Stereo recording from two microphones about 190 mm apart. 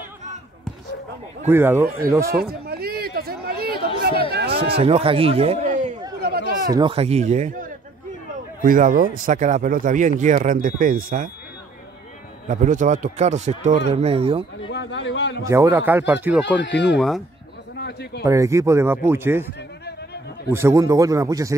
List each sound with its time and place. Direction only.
1.5 s speech: 10° right (ahead or behind)
2.7 s a sound: 55° right (ahead or behind)
4.6 s a man's voice: 30° right (ahead or behind)
6.2 s a sound: 55° right (ahead or behind)
6.7 s a man's voice: 25° right (ahead or behind)
8.6 s speech: 45° right (ahead or behind)
12.4 s a man's voice: 40° right (ahead or behind)
14.7 s a man's voice: 70° left (ahead or behind)
15.4 s speech: 15° right (ahead or behind)
16.5 s speech: 70° left (ahead or behind)
17.7 s a sound: 60° left (ahead or behind)
18.2 s speech: 15° right (ahead or behind)
20.4 s speech: 15° right (ahead or behind)